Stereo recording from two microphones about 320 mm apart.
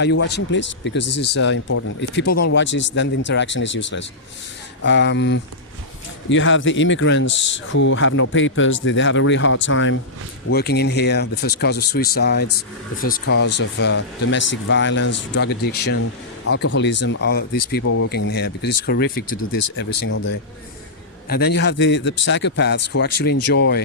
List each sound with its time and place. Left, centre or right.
0.0 s speech: left
2.2 s speech: left
2.5 s speech: left
17.8 s speech: left
18.1 s speech: left
19.0 s speech: left
20.1 s speech: left